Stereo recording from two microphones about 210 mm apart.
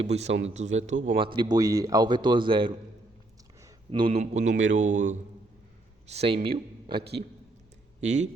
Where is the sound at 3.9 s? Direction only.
25° right (ahead or behind).